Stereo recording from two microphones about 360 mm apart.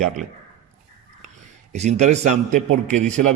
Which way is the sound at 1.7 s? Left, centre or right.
Centre.